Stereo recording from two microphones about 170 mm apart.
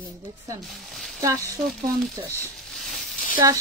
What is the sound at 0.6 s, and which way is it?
Speech, centre (ahead or behind).